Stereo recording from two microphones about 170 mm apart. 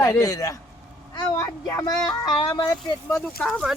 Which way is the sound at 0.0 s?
15° left (ahead or behind).